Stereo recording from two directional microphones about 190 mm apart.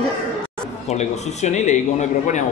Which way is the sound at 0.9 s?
35° left (ahead or behind).